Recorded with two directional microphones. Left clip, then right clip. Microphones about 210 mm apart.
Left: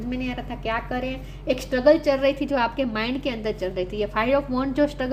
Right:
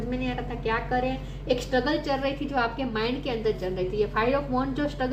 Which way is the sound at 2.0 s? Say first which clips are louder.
Left 7 dB; 55° left (ahead or behind).